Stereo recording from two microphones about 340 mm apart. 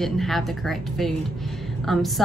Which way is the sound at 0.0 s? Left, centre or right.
Centre.